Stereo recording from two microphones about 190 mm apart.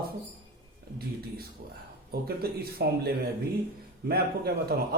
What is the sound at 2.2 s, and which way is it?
A man's voice, 55° right (ahead or behind).